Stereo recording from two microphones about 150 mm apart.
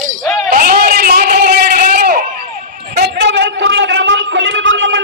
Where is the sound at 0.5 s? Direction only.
70° right (ahead or behind); by 3.2 s 90° right.